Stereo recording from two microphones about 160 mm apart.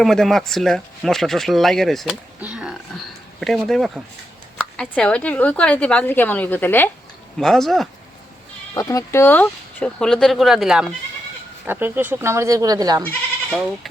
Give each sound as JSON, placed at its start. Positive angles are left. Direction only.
{"t": 0.0, "sound": "speech", "side_deg": 0}
{"t": 2.4, "sound": "a sound", "side_deg": -5}
{"t": 3.7, "sound": "speech", "side_deg": 0}
{"t": 7.3, "sound": "speech", "side_deg": 0}
{"t": 8.7, "sound": "speech", "side_deg": 20}
{"t": 11.6, "sound": "speech", "side_deg": -15}
{"t": 13.5, "sound": "speech", "side_deg": 0}